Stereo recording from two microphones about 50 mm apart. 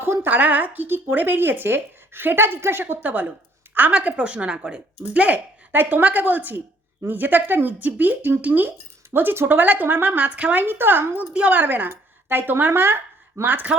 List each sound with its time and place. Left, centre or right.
0.0 s a sound: right
0.3 s speech: right
0.9 s a woman's voice: right
2.8 s speech: right
9.0 s a woman's voice: right
9.6 s speech: right
10.7 s a woman's voice: right
11.2 s speech: right
11.6 s a woman's voice: right
13.4 s speech: right